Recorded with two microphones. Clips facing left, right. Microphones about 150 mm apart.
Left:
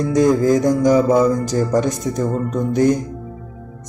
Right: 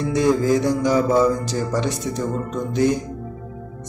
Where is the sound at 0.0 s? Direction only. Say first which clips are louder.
Left 4 dB; 45° left (ahead or behind).